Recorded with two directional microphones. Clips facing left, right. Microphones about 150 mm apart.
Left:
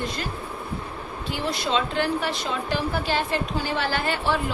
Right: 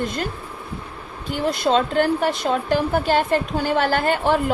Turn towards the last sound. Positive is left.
turn(degrees=-50)  # may be behind; listen again after turning